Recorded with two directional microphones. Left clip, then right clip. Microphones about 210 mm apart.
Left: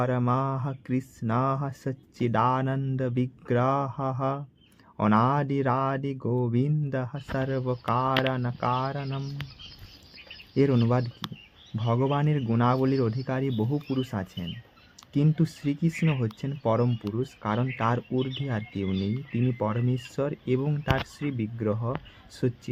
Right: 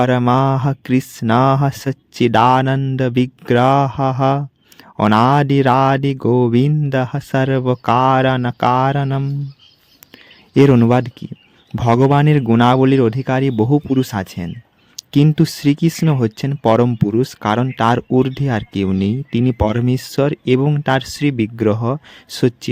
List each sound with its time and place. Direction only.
0.0 s speech: 45° right (ahead or behind)
10.5 s speech: 45° right (ahead or behind)